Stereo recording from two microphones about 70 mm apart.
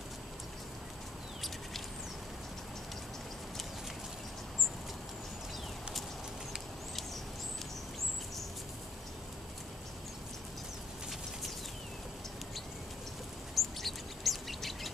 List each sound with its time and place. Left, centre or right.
13.6 s bird: centre